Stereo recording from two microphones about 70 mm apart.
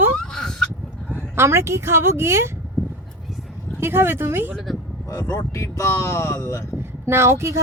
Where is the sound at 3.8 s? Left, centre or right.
Right.